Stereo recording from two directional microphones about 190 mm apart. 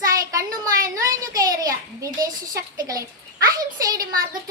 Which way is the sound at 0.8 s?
15° right (ahead or behind).